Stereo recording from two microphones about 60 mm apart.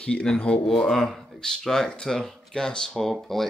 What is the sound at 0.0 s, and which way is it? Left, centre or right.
Speech, centre.